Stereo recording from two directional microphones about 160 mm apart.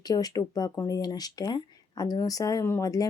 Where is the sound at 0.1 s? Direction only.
25° left (ahead or behind).